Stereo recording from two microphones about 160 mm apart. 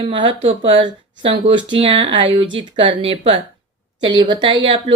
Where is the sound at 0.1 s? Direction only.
30° right (ahead or behind).